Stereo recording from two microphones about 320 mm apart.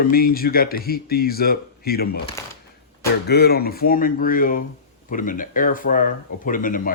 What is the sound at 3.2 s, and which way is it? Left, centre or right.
Speech, left.